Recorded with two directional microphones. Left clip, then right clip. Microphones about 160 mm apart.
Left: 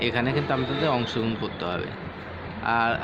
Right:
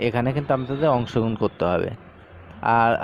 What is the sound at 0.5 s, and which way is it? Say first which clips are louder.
Speech: right 6 dB; 45° right (ahead or behind).